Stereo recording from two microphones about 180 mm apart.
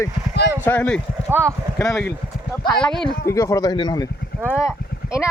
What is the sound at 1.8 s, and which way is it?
Speech, 15° left (ahead or behind).